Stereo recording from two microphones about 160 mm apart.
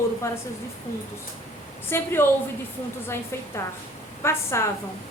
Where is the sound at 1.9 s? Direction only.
15° left (ahead or behind).